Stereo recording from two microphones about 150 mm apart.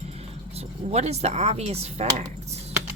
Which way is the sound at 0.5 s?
45° right (ahead or behind).